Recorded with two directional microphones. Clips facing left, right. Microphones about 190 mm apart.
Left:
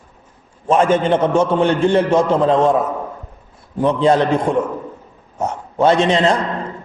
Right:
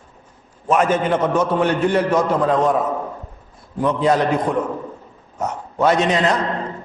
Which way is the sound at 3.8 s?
30° left (ahead or behind).